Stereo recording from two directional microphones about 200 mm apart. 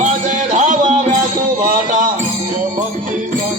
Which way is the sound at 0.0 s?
35° right (ahead or behind).